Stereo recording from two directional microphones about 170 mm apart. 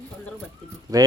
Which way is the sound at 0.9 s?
20° right (ahead or behind).